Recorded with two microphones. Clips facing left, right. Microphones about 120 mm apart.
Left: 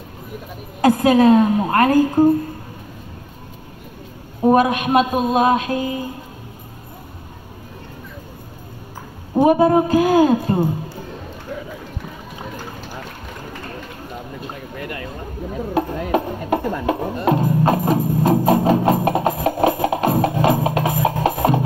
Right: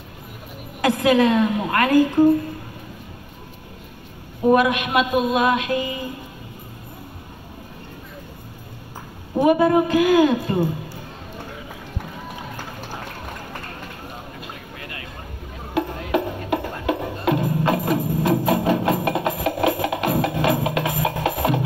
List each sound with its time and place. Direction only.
0.7 s a man's voice: 40° left (ahead or behind)
4.4 s a man's voice: 35° left (ahead or behind)
9.4 s a man's voice: 35° left (ahead or behind)
15.7 s music: 40° left (ahead or behind)